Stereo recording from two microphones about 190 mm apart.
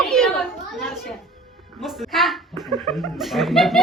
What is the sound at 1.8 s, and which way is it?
Speech, centre (ahead or behind).